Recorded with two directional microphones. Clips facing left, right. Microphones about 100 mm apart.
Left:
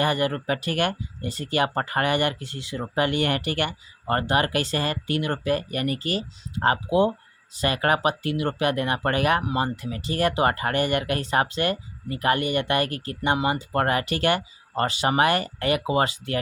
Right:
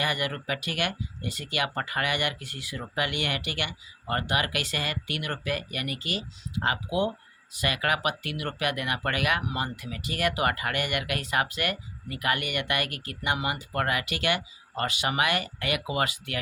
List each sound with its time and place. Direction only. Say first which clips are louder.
0.0 s speech: left 6 dB; 35° left (ahead or behind)